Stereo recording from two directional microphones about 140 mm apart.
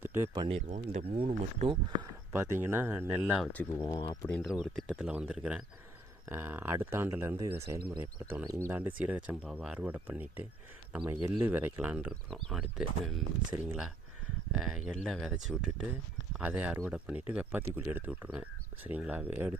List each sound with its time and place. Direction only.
0.0 s a sound: 15° right (ahead or behind)
0.3 s speech: 45° right (ahead or behind)
1.1 s speech: 45° right (ahead or behind)
2.3 s speech: 15° right (ahead or behind)
3.4 s speech: 10° left (ahead or behind)
3.8 s speech: 30° left (ahead or behind)
4.3 s speech: 10° left (ahead or behind)
4.9 s speech: 5° right (ahead or behind)
9.0 s speech: 10° right (ahead or behind)
12.3 s speech: centre (ahead or behind)